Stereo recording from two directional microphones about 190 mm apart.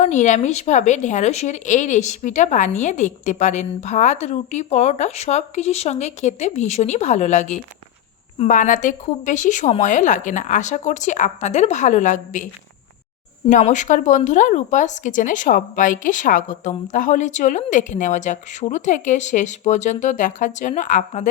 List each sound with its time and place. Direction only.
0.0 s speech: 40° left (ahead or behind)
13.5 s speech: 40° left (ahead or behind)